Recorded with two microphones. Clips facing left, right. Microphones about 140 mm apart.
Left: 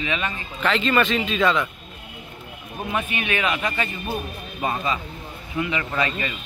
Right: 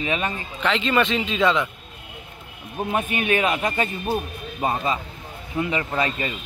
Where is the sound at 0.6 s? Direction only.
20° right (ahead or behind).